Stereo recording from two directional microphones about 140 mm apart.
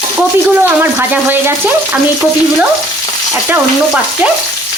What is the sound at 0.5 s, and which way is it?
Speech, 15° right (ahead or behind).